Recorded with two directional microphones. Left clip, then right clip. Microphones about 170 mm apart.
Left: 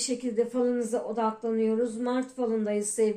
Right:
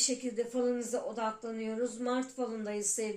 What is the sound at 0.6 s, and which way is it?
A woman's voice, 35° left (ahead or behind).